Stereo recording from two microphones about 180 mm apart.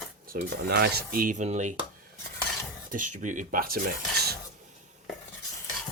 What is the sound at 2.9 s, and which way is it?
Speech, 45° right (ahead or behind).